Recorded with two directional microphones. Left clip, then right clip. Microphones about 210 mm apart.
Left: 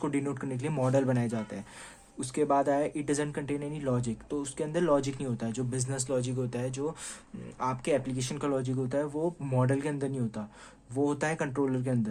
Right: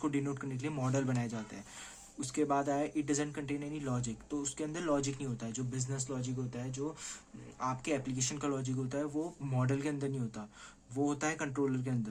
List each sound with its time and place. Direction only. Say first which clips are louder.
0.0 s speech: left 4 dB; 35° left (ahead or behind)